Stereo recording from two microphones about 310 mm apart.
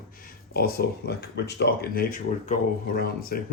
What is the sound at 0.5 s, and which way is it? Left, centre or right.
Speech, left.